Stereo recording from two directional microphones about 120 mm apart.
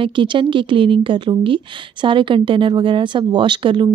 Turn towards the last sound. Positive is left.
turn(degrees=-45)  # may be behind; listen again after turning